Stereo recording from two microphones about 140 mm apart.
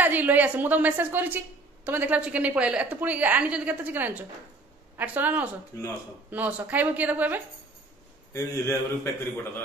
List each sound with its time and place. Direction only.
0.0 s a woman's voice: 15° right (ahead or behind)
8.3 s a man's voice: 20° left (ahead or behind)